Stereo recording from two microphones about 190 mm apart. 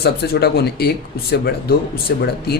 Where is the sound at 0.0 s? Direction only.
55° left (ahead or behind).